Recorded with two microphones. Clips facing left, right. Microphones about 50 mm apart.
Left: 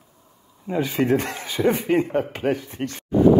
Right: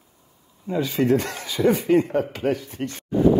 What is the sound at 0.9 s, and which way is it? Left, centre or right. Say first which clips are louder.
Speech: right 1 dB; left.